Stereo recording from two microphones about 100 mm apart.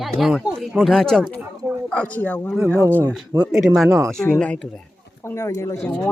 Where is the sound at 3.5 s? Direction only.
5° right (ahead or behind).